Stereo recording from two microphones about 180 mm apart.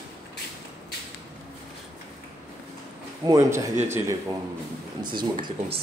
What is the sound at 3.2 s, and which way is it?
Speech, 20° right (ahead or behind).